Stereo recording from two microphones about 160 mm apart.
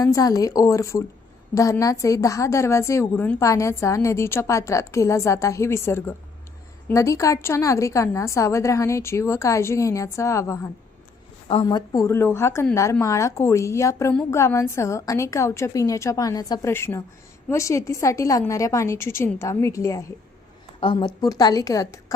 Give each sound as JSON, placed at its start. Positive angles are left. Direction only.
{"t": 0.0, "sound": "a woman's voice", "side_deg": 20}
{"t": 20.8, "sound": "a woman's voice", "side_deg": 30}